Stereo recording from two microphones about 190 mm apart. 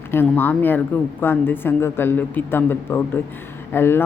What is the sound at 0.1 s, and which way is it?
Speech, 10° left (ahead or behind).